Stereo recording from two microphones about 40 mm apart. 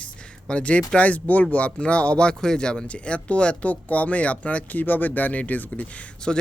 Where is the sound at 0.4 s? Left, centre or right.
Left.